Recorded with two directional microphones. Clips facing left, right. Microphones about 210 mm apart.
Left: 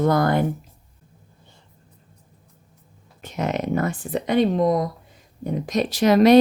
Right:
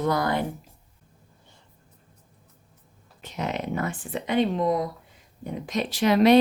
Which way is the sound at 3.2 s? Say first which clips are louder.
Left 5 dB; 50° left (ahead or behind).